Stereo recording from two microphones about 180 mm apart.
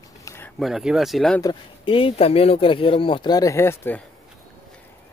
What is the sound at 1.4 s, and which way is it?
Speech, 25° left (ahead or behind).